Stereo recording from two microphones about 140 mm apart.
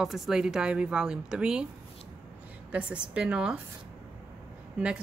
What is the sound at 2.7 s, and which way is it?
Speech, 10° right (ahead or behind).